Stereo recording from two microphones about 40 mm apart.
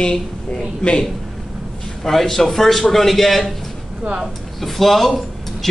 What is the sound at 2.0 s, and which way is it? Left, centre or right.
A man's voice, centre.